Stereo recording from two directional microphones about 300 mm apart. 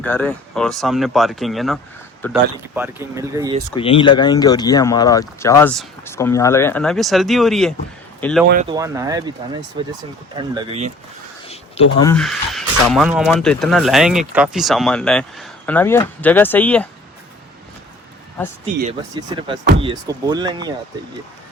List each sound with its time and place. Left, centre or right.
0.0 s speech: centre
3.8 s speech: centre
8.6 s speech: centre
11.4 s a sound: centre
12.1 s speech: centre
18.6 s speech: centre